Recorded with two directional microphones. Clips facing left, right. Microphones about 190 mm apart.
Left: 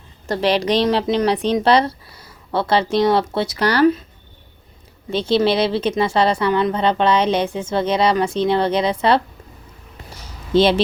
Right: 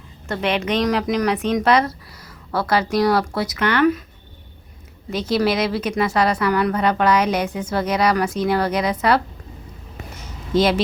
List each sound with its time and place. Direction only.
0.3 s a woman's voice: 35° left (ahead or behind)
5.1 s a woman's voice: 30° left (ahead or behind)
10.1 s a sound: 35° left (ahead or behind)